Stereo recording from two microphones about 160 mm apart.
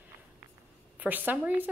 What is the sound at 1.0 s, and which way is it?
Speech, 10° right (ahead or behind).